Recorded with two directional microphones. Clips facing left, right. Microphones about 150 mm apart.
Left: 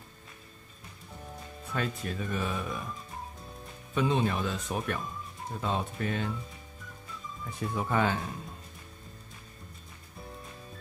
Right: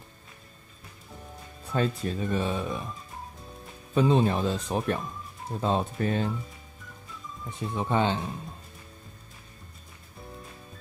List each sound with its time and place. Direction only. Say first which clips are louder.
1.7 s speech: right 6 dB; 30° right (ahead or behind)
3.9 s speech: right 5 dB; 30° right (ahead or behind)
7.4 s speech: right 2 dB; 20° right (ahead or behind)